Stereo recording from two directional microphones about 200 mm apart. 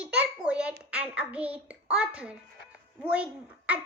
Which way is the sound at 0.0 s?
5° right (ahead or behind).